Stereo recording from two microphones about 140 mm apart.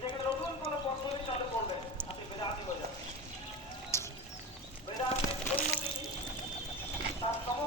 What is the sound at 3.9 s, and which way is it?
Music, 20° left (ahead or behind).